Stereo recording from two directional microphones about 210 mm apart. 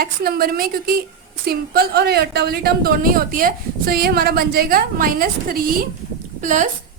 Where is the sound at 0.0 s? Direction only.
45° right (ahead or behind).